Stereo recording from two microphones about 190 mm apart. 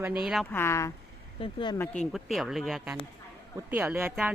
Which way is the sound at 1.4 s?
25° left (ahead or behind).